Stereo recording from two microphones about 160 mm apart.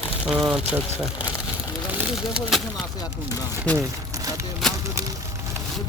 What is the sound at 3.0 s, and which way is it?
Speech, 20° left (ahead or behind).